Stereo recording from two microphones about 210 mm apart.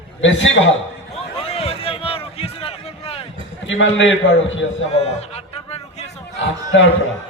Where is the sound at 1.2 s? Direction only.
30° left (ahead or behind).